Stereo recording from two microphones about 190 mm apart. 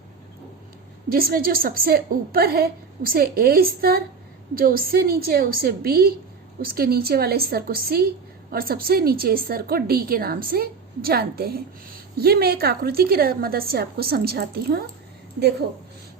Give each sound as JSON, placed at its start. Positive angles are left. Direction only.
{"t": 1.1, "sound": "a woman's voice", "side_deg": -50}